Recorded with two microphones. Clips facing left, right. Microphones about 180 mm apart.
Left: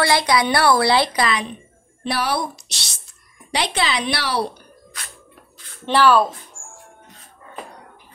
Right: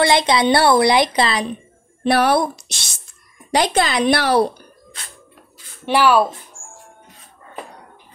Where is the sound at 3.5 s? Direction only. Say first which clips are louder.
Right 5 dB; 45° right (ahead or behind).